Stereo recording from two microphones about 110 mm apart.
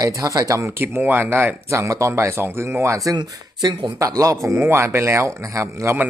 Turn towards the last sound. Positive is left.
turn(degrees=-25)  # may be behind; listen again after turning